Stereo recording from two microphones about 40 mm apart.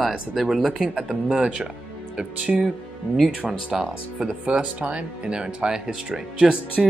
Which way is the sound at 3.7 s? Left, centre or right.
Centre.